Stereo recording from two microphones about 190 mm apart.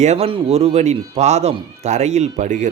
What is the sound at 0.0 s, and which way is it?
Speech, 35° right (ahead or behind).